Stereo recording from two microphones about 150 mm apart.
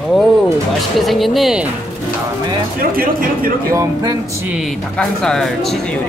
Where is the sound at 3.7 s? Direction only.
25° right (ahead or behind).